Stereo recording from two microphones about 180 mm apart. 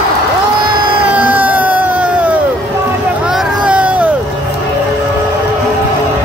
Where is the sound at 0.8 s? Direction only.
30° right (ahead or behind).